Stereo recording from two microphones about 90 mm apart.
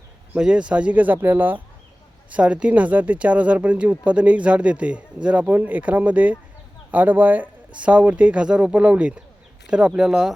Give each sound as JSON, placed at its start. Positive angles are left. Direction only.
{"t": 0.3, "sound": "speech", "side_deg": -10}